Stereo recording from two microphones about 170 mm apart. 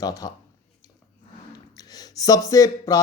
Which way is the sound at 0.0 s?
20° left (ahead or behind).